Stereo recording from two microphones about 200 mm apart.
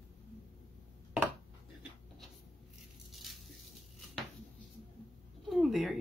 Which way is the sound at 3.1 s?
Centre (ahead or behind).